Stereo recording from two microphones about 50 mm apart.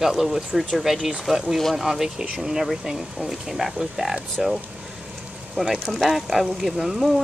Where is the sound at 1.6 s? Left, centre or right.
Centre.